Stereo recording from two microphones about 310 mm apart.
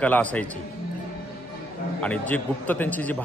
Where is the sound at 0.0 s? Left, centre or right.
Centre.